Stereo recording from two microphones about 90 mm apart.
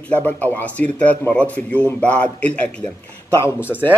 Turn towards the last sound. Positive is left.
turn(degrees=-15)  # may be behind; listen again after turning